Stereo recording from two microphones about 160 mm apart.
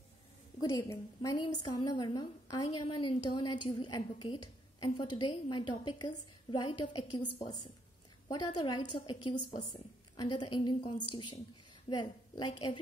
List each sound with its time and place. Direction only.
0.6 s a woman's voice: 25° left (ahead or behind)